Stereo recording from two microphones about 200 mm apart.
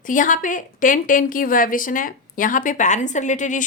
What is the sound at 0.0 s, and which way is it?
A woman's voice, 40° left (ahead or behind).